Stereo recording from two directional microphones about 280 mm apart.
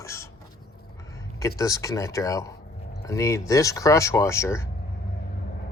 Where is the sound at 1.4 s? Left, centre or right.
Centre.